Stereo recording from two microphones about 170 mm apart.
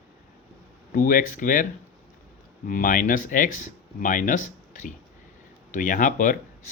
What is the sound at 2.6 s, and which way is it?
Speech, 55° left (ahead or behind).